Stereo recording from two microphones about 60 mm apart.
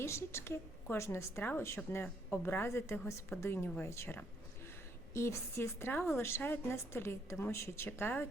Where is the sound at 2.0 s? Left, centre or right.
Left.